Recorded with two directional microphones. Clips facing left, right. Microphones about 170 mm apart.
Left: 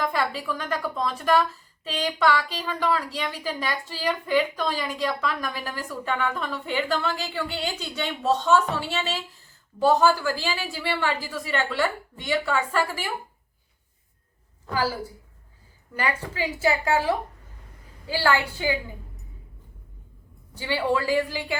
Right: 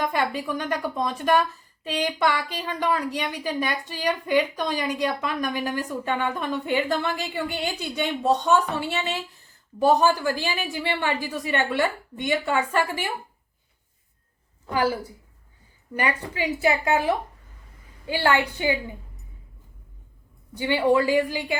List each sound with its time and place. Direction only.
0.0 s a woman's voice: 15° right (ahead or behind)
14.7 s a woman's voice: 20° right (ahead or behind)
16.0 s a woman's voice: 15° right (ahead or behind)
20.6 s a woman's voice: 15° right (ahead or behind)